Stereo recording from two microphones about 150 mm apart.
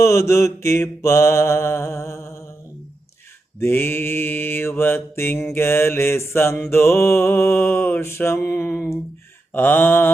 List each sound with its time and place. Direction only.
0.0 s mantra: 20° left (ahead or behind)
3.6 s mantra: 15° left (ahead or behind)